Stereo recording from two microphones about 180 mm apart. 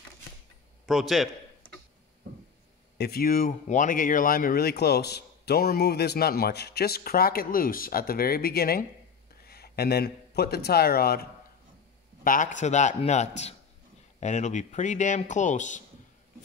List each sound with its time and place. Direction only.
0.8 s a man's voice: centre (ahead or behind)
3.0 s speech: 55° left (ahead or behind)
12.2 s a man's voice: 45° left (ahead or behind)